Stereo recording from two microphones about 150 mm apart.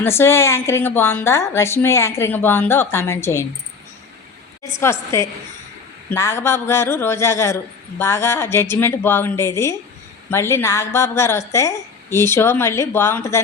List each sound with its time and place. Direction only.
0.0 s a woman's voice: 15° left (ahead or behind)
4.7 s a woman's voice: 20° left (ahead or behind)